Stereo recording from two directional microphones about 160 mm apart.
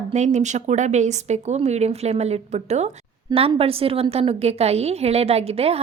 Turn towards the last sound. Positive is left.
turn(degrees=-40)  # may be behind; listen again after turning